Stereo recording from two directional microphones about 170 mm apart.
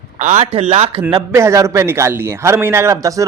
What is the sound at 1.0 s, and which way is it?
A man's voice, 20° right (ahead or behind).